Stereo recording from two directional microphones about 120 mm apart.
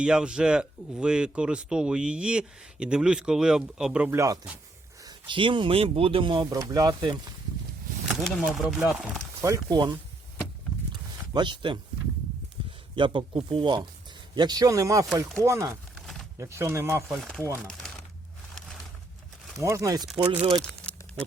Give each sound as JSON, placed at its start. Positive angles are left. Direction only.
{"t": 0.0, "sound": "speech", "side_deg": -5}
{"t": 4.1, "sound": "speech", "side_deg": -25}
{"t": 5.0, "sound": "speech", "side_deg": -45}
{"t": 6.5, "sound": "speech", "side_deg": -30}
{"t": 8.0, "sound": "speech", "side_deg": 0}
{"t": 9.4, "sound": "speech", "side_deg": -30}
{"t": 10.9, "sound": "a sound", "side_deg": -40}
{"t": 13.0, "sound": "speech", "side_deg": -45}
{"t": 17.1, "sound": "speech", "side_deg": 5}
{"t": 19.5, "sound": "speech", "side_deg": -25}
{"t": 20.2, "sound": "speech", "side_deg": -45}
{"t": 20.6, "sound": "crumpling", "side_deg": 10}